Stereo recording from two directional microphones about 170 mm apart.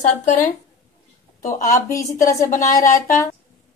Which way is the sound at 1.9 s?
20° left (ahead or behind).